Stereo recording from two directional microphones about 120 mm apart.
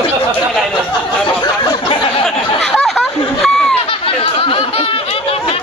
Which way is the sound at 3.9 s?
50° left (ahead or behind).